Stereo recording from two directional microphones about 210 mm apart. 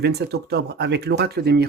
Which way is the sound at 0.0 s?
50° right (ahead or behind).